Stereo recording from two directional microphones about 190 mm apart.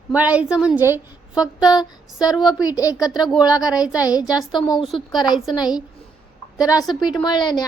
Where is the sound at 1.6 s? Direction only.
20° left (ahead or behind).